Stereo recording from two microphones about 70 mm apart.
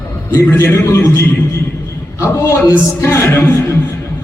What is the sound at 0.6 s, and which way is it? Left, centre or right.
Speech, left.